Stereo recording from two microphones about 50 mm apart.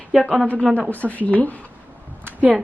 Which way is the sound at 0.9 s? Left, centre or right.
Left.